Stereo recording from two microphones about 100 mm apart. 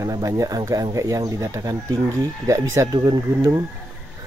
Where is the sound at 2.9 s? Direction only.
40° right (ahead or behind).